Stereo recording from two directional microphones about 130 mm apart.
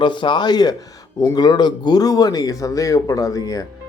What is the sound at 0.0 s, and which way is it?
A man's voice, 40° left (ahead or behind).